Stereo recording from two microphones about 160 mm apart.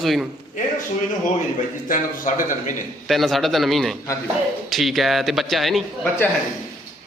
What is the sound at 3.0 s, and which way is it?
A man's voice, centre (ahead or behind).